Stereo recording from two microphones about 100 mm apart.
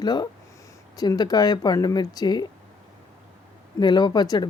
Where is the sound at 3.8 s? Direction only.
45° left (ahead or behind).